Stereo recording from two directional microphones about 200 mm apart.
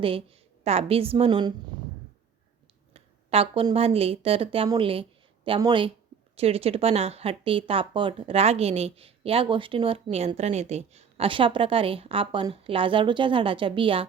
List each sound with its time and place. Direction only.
0.6 s speech: 30° right (ahead or behind)
2.9 s speech: 30° right (ahead or behind)